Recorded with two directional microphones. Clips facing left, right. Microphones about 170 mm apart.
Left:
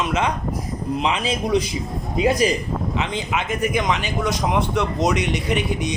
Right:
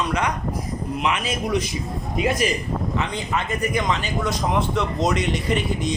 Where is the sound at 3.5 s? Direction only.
20° left (ahead or behind).